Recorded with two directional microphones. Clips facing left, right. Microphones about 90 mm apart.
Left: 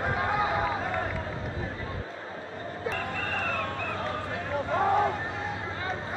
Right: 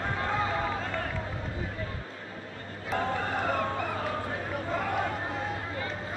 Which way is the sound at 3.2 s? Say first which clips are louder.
Right 2 dB; 20° right (ahead or behind).